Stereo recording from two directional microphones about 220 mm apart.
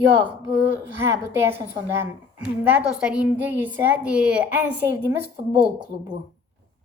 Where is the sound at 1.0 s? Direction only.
10° right (ahead or behind).